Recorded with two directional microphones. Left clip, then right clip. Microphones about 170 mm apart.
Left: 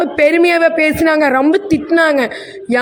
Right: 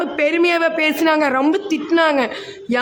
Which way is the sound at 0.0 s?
25° left (ahead or behind).